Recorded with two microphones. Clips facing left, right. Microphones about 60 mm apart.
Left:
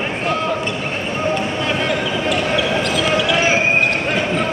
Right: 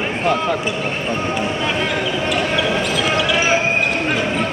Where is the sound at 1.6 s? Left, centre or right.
Centre.